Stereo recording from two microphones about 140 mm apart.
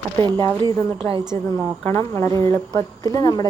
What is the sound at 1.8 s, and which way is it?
A woman's voice, 15° left (ahead or behind).